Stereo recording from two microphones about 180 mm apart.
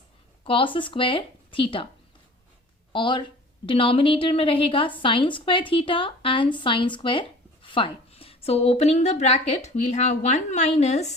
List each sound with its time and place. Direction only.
0.4 s a woman's voice: 30° left (ahead or behind)
2.9 s a woman's voice: 25° left (ahead or behind)